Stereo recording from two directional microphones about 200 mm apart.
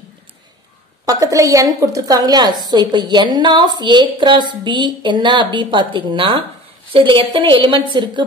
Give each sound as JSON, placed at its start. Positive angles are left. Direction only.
{"t": 1.0, "sound": "a woman's voice", "side_deg": -15}